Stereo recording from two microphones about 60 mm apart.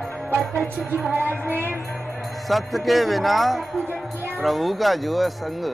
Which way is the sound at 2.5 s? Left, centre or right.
Centre.